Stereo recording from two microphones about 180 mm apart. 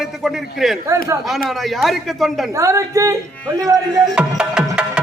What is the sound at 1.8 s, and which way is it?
Music, centre (ahead or behind).